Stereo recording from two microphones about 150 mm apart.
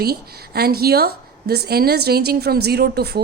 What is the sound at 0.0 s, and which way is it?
A woman's voice, 90° right.